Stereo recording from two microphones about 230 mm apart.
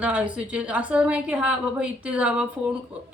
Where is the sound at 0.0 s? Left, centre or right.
Centre.